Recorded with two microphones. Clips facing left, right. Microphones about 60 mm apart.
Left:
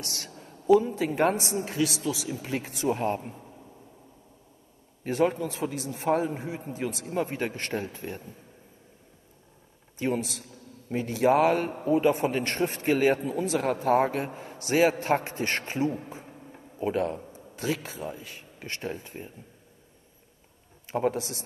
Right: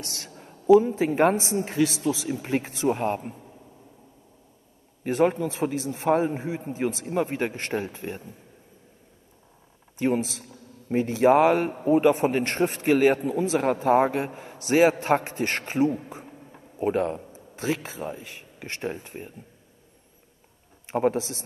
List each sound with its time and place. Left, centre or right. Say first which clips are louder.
0.3 s a sound: right 1 dB; right
0.7 s speech: right 4 dB; right
5.0 s speech: right 3 dB; right
9.9 s a man's voice: right 4 dB; right
17.7 s speech: right 2 dB; right
20.9 s speech: right 3 dB; right